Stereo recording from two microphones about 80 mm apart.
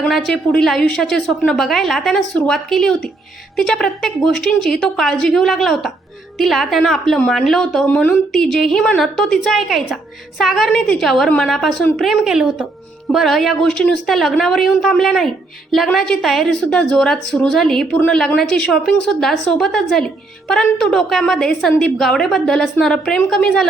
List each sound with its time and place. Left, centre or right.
0.1 s a woman's voice: centre
7.9 s a woman's voice: centre
8.3 s a woman's voice: centre